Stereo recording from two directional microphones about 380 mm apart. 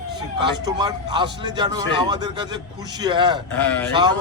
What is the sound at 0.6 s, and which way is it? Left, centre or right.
A man's voice, centre.